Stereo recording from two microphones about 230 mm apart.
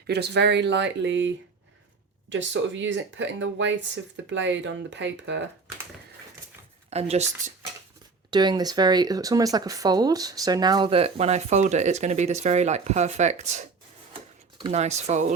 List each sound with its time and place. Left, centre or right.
0.1 s speech: right
2.3 s speech: right
6.9 s speech: right
8.3 s speech: centre